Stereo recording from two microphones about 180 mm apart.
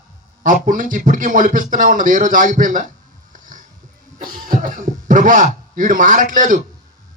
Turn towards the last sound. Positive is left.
turn(degrees=-45)  # may be behind; listen again after turning